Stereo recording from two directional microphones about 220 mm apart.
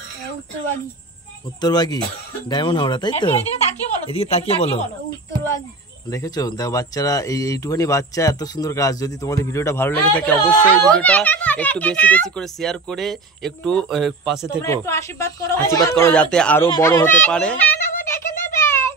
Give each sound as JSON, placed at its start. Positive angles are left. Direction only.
{"t": 1.6, "sound": "speech", "side_deg": 20}
{"t": 6.1, "sound": "speech", "side_deg": 15}
{"t": 14.6, "sound": "speech", "side_deg": 15}
{"t": 16.7, "sound": "a sound", "side_deg": 15}